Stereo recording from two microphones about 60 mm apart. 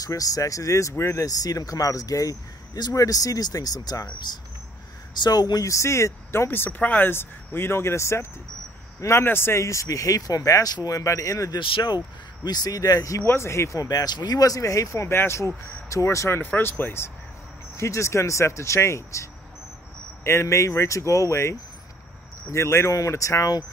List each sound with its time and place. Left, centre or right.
0.0 s speech: left
1.2 s speech: left
5.3 s speech: left
6.8 s speech: left
7.1 s speech: left
12.5 s speech: left
13.2 s speech: left
15.0 s speech: left
16.3 s speech: left
17.7 s speech: left
20.2 s speech: left